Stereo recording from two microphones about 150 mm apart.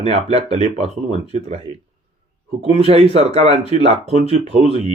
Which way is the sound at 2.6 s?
40° right (ahead or behind).